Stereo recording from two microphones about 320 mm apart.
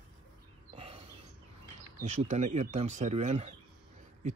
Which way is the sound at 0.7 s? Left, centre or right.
Centre.